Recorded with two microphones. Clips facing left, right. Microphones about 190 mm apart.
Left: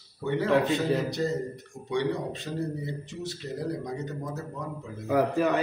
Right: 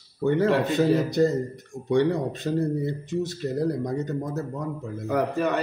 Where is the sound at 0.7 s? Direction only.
45° right (ahead or behind).